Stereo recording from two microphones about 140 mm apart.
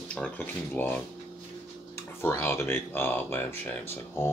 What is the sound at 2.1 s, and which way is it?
Speech, 15° left (ahead or behind).